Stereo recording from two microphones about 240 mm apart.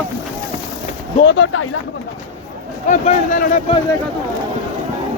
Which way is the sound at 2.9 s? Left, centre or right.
Left.